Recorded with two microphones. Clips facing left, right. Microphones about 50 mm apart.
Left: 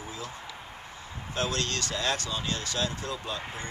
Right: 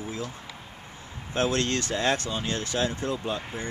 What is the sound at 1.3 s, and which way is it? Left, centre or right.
Speech, right.